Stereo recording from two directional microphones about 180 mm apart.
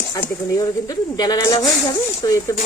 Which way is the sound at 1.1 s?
20° left (ahead or behind).